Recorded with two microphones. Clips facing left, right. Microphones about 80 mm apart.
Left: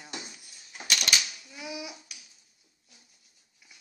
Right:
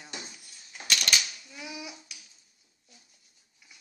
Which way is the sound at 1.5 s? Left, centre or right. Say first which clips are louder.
Left 4 dB; centre.